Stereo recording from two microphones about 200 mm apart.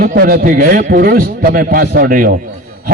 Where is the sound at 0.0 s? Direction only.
45° right (ahead or behind).